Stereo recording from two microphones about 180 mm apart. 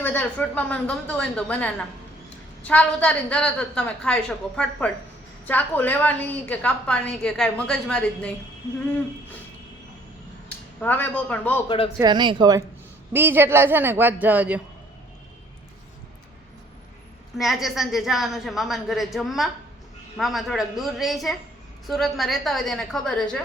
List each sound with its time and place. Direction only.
0.0 s a woman's voice: 10° left (ahead or behind)
10.8 s a woman's voice: 10° left (ahead or behind)
11.9 s speech: 25° right (ahead or behind)
13.1 s a man's voice: 10° right (ahead or behind)
17.3 s a woman's voice: centre (ahead or behind)